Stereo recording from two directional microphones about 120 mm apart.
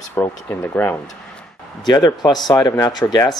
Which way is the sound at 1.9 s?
35° left (ahead or behind).